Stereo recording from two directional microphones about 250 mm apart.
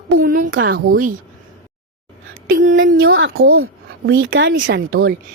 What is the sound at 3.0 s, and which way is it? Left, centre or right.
A woman's voice, right.